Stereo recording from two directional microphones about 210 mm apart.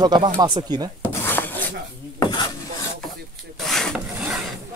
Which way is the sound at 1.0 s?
10° left (ahead or behind).